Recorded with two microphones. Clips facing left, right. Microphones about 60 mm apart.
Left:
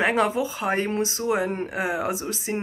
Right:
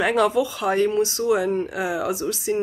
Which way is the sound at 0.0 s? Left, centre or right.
Left.